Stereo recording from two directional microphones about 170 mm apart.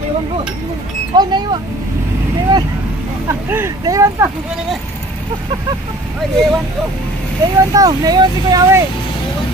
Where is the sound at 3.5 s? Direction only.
15° right (ahead or behind).